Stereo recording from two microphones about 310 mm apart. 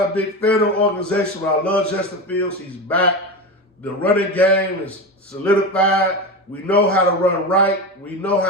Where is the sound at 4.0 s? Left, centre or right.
Centre.